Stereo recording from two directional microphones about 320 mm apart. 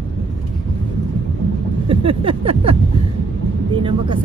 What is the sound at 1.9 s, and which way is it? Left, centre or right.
Speech, centre.